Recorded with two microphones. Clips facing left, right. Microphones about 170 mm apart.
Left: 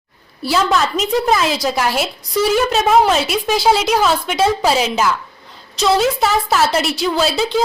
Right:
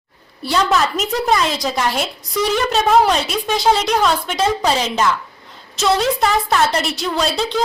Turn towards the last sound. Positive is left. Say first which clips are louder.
# left 2 dB
turn(degrees=5)  # may be behind; listen again after turning